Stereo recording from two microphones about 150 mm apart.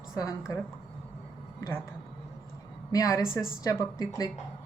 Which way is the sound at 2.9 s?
25° left (ahead or behind).